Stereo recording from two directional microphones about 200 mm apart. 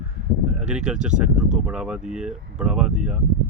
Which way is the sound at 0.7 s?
5° right (ahead or behind).